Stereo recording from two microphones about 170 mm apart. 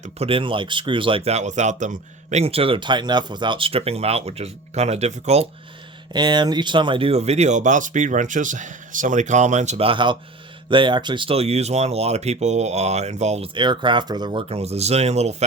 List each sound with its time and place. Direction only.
0.0 s speech: 35° right (ahead or behind)
6.1 s speech: 25° right (ahead or behind)